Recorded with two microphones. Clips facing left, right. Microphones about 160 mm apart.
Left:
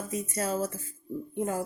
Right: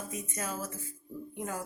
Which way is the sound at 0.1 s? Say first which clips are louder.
Left 11 dB; 30° left (ahead or behind).